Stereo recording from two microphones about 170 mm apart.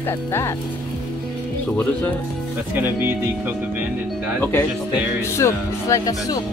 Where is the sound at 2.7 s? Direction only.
10° right (ahead or behind).